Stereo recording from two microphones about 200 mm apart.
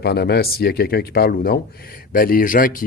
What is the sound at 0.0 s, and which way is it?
Speech, 55° left (ahead or behind).